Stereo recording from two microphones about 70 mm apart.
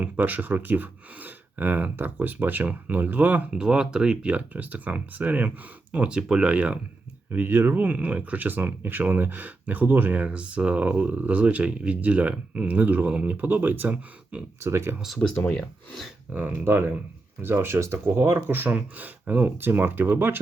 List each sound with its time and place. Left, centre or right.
0.0 s speech: right
3.5 s speech: centre
7.3 s speech: right
14.6 s speech: right
15.4 s speech: centre
16.3 s speech: right